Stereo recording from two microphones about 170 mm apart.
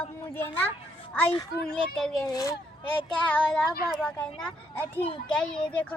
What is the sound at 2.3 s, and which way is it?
Speech, 20° left (ahead or behind).